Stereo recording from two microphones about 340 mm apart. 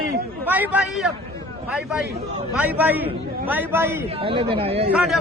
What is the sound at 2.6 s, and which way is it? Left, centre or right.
A man's voice, centre.